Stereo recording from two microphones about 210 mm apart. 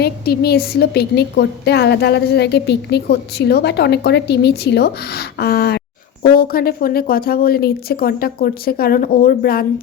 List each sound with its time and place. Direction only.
0.0 s a woman's voice: 50° left (ahead or behind)